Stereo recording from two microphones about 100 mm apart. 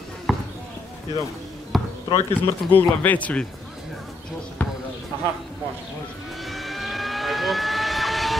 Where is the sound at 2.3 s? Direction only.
15° left (ahead or behind).